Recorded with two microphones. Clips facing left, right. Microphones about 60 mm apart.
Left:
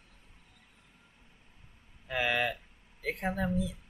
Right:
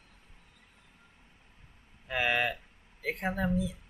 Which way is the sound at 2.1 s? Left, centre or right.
Centre.